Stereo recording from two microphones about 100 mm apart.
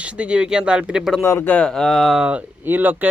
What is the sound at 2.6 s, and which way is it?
Speech, 20° right (ahead or behind).